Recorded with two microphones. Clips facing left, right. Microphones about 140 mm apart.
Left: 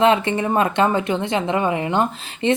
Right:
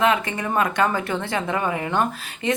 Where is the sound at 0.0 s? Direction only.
25° left (ahead or behind).